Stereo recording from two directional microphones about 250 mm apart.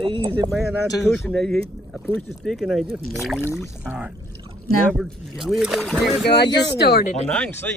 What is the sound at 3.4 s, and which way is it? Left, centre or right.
Speech, centre.